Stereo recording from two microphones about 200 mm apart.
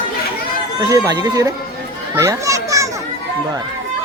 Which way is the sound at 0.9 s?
20° right (ahead or behind).